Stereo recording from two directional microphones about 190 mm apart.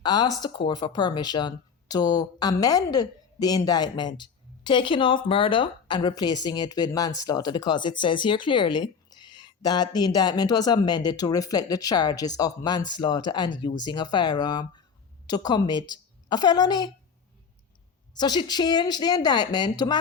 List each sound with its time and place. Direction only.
0.0 s speech: 20° left (ahead or behind)
18.1 s speech: 20° left (ahead or behind)